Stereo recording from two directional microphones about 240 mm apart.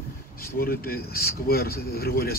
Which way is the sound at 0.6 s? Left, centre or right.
Left.